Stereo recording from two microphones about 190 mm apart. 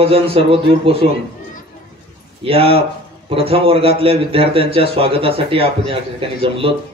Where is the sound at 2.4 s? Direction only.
30° right (ahead or behind).